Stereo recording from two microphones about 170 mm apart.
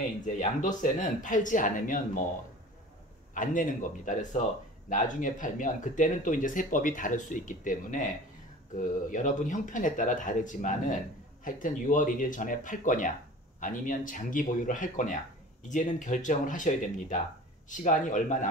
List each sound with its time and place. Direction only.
0.2 s speech: 45° left (ahead or behind)
3.3 s speech: 50° left (ahead or behind)